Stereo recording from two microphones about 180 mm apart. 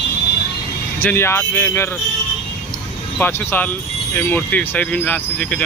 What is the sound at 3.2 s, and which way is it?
Speech, 10° left (ahead or behind).